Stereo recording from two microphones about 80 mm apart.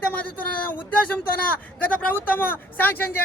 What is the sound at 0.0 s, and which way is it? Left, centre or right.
A man's voice, left.